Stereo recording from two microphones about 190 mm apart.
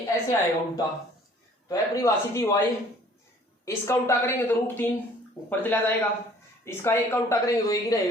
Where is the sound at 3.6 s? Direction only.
15° left (ahead or behind).